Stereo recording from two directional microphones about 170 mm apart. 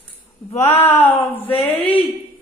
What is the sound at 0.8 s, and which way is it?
Speech, 15° left (ahead or behind).